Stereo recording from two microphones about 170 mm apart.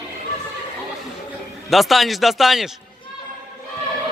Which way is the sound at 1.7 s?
Centre (ahead or behind).